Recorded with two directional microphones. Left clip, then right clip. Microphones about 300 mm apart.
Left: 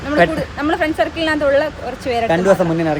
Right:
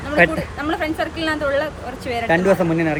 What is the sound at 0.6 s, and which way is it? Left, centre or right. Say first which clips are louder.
Speech: left 6 dB; centre.